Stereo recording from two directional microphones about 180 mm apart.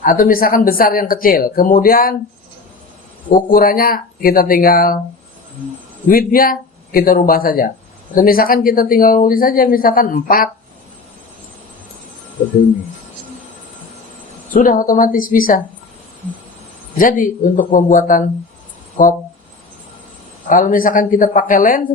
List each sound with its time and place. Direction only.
0.0 s speech: 50° left (ahead or behind)
3.2 s speech: 50° left (ahead or behind)
6.1 s speech: 55° left (ahead or behind)
14.5 s speech: 50° left (ahead or behind)
17.0 s speech: 50° left (ahead or behind)
20.5 s speech: 50° left (ahead or behind)